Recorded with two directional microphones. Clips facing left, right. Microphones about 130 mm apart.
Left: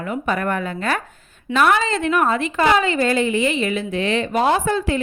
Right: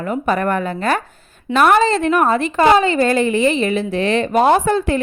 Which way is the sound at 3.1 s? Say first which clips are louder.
Right 4 dB; 45° right (ahead or behind).